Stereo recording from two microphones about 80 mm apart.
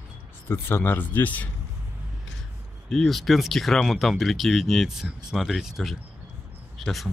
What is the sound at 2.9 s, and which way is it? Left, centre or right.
Speech, centre.